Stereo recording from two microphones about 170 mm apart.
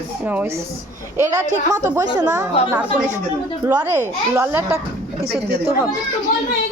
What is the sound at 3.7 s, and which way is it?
Speech, 15° right (ahead or behind).